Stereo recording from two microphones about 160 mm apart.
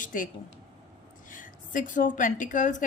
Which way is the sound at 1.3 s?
55° left (ahead or behind).